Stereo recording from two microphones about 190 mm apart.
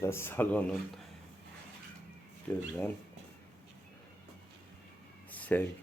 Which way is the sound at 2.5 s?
15° left (ahead or behind).